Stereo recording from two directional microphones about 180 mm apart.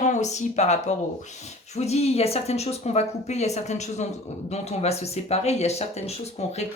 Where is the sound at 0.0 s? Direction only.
40° left (ahead or behind).